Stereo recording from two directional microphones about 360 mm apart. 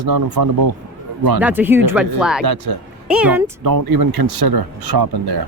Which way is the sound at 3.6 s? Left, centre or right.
Right.